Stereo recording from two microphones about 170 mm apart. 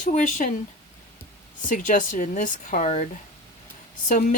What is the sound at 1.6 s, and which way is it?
Speech, 50° left (ahead or behind).